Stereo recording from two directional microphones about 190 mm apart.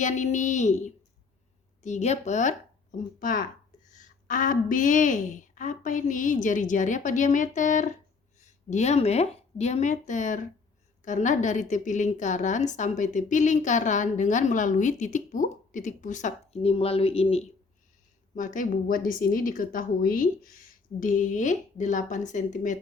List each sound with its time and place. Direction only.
0.0 s a woman's voice: 40° left (ahead or behind)
18.3 s a woman's voice: 45° left (ahead or behind)